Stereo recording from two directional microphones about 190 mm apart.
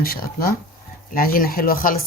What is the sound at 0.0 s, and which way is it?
Speech, 50° left (ahead or behind).